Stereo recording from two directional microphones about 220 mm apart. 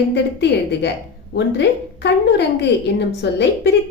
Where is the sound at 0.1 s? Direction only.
50° left (ahead or behind).